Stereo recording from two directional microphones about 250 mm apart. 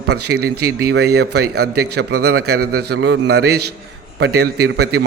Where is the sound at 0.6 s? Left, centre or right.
Right.